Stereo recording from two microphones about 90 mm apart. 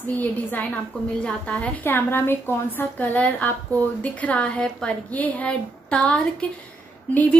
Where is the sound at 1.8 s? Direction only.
25° left (ahead or behind).